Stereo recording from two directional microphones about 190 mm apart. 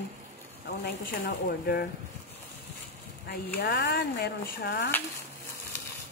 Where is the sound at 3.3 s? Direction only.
55° left (ahead or behind).